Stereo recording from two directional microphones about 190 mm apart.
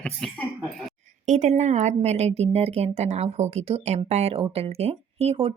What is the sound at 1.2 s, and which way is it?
Speech, 40° right (ahead or behind).